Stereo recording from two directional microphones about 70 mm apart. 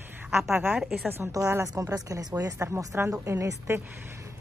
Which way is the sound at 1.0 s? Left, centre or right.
Right.